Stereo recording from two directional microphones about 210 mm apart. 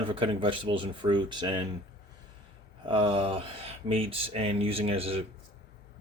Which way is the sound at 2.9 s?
25° right (ahead or behind).